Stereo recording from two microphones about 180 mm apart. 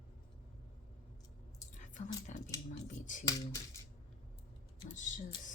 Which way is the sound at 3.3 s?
20° left (ahead or behind).